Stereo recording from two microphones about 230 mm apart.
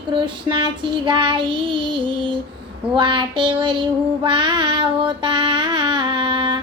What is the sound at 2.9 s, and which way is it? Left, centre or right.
Child singing, right.